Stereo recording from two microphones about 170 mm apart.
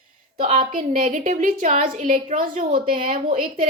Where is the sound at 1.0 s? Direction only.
50° right (ahead or behind).